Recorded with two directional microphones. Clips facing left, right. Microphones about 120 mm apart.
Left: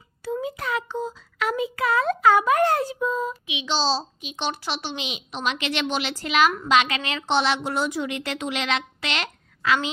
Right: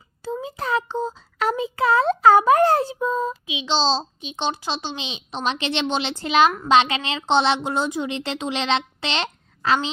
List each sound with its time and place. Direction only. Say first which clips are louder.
0.4 s child singing: right 3 dB; 30° right (ahead or behind)
6.7 s a woman's voice: right 3 dB; 30° right (ahead or behind)